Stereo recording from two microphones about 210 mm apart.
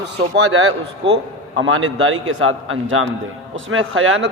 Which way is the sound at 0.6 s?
60° right (ahead or behind).